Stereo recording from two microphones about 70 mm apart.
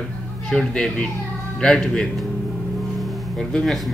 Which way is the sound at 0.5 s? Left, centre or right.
Centre.